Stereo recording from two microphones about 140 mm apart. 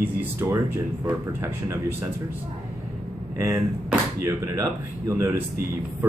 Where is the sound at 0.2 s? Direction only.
15° right (ahead or behind).